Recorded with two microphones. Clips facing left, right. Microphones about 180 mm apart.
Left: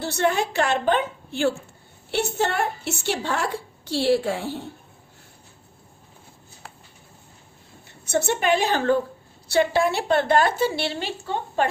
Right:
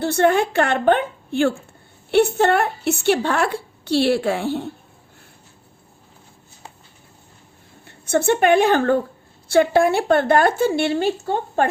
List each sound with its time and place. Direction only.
0.0 s speech: 55° right (ahead or behind)
7.9 s a woman's voice: 60° right (ahead or behind)